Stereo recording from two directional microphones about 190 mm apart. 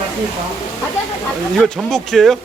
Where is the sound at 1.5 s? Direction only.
Centre (ahead or behind).